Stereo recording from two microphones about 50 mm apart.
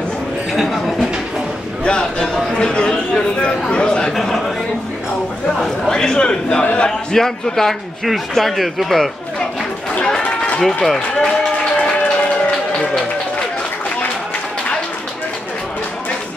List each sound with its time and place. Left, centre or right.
0.5 s a sound: centre
1.9 s a man's voice: centre
4.1 s a man's voice: centre
5.6 s a man's voice: centre
6.9 s a man's voice: centre
10.0 s a sound: left
10.6 s a man's voice: centre
12.4 s run: centre